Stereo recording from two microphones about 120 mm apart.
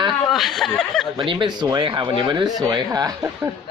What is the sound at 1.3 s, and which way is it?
Speech, 40° right (ahead or behind).